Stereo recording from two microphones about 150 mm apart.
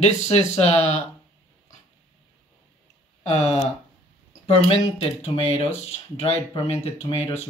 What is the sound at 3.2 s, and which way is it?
Speech, 45° left (ahead or behind).